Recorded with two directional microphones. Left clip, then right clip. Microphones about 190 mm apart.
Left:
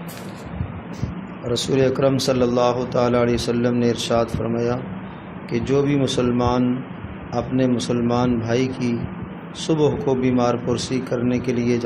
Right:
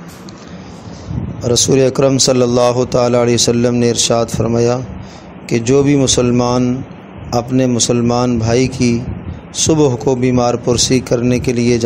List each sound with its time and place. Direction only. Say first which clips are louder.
1.5 s a man's voice: right 7 dB; 45° right (ahead or behind)